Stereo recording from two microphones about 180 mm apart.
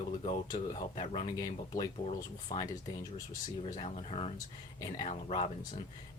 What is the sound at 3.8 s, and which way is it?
Speech, 35° left (ahead or behind).